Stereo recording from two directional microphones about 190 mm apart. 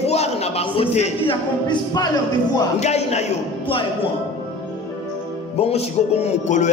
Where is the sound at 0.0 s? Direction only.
35° left (ahead or behind).